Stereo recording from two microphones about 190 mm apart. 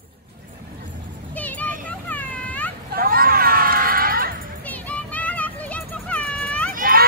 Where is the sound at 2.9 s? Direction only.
50° right (ahead or behind).